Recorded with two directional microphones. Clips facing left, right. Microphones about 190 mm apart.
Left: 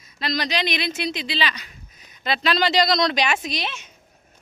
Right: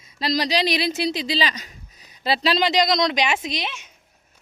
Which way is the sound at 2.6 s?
20° right (ahead or behind).